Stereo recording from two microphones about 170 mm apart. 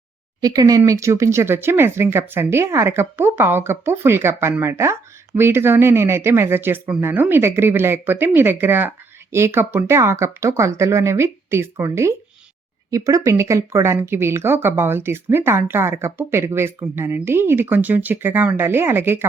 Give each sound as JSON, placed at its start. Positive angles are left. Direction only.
{"t": 0.4, "sound": "speech", "side_deg": -20}